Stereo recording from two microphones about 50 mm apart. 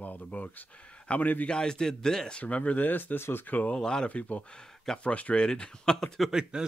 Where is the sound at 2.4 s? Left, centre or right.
Left.